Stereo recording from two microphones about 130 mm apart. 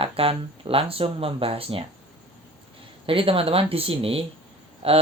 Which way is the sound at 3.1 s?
45° right (ahead or behind).